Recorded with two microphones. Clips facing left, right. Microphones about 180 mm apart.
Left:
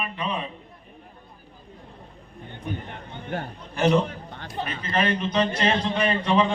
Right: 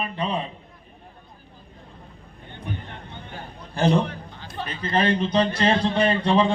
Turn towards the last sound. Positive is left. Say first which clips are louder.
# right 2 dB
turn(degrees=-30)  # may be behind; listen again after turning